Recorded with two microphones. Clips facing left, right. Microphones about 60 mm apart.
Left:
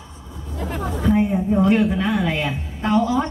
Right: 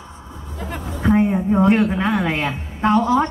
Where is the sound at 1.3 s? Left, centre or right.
Right.